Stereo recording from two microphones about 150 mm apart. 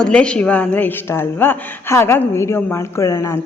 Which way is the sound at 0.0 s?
5° left (ahead or behind).